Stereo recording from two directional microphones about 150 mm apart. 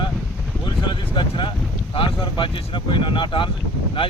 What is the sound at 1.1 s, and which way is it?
Speech, 35° left (ahead or behind).